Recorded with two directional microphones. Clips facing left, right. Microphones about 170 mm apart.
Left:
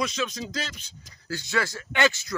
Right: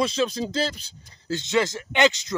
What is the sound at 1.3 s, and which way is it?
Speech, 20° right (ahead or behind).